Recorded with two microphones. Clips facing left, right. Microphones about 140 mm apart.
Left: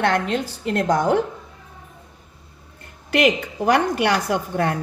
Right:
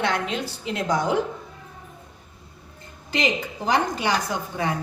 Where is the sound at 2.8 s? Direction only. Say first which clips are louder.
Left 7 dB; 70° left (ahead or behind).